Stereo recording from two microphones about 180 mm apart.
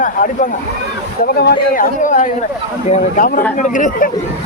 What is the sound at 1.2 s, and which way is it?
Speech, 55° left (ahead or behind).